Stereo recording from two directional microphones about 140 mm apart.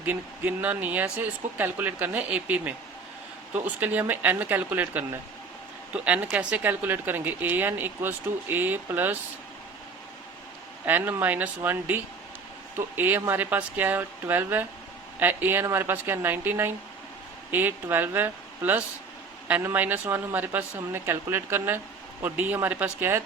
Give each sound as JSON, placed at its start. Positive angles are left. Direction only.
{"t": 0.0, "sound": "speech", "side_deg": -10}
{"t": 10.8, "sound": "speech", "side_deg": -15}